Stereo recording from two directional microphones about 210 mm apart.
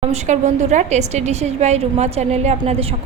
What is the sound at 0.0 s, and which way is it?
A woman's voice, 30° right (ahead or behind).